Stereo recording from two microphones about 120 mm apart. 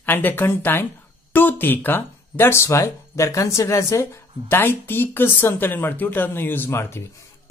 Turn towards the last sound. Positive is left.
turn(degrees=20)  # may be behind; listen again after turning